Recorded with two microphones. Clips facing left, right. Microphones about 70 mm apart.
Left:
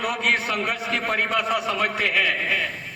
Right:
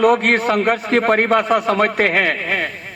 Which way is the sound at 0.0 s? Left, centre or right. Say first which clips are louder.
Right 10 dB; right.